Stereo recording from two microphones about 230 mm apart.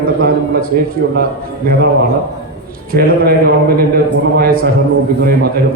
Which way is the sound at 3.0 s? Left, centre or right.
Right.